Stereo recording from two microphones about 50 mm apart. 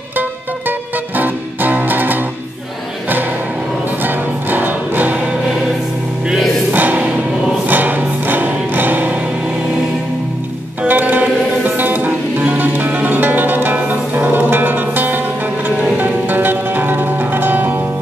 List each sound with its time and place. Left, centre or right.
0.1 s music: right
4.0 s music: right
6.7 s music: right
10.9 s music: right